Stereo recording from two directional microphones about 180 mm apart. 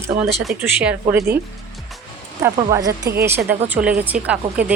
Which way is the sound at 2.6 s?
20° right (ahead or behind).